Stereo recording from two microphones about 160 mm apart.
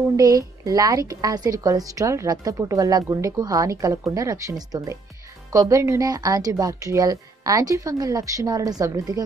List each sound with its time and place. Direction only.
0.1 s a woman's voice: 20° right (ahead or behind)